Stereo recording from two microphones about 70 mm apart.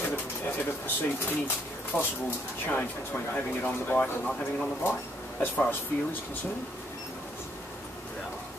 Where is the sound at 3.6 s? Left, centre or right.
Left.